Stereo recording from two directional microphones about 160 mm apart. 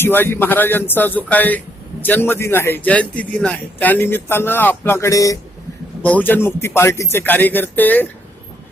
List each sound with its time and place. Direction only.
0.0 s speech: 15° left (ahead or behind)
6.0 s speech: 10° left (ahead or behind)